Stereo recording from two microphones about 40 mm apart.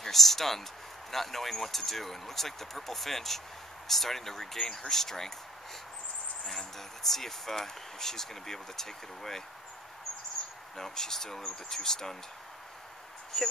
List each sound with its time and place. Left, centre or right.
0.0 s a man's voice: centre
6.4 s speech: centre
10.8 s speech: centre
13.3 s speech: centre